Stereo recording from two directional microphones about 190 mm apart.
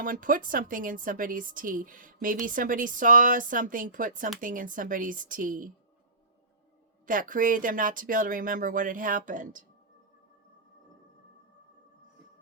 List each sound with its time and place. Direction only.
0.0 s speech: 45° right (ahead or behind)
7.1 s speech: 45° right (ahead or behind)